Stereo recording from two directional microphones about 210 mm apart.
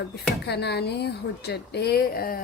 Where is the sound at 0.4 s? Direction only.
50° left (ahead or behind).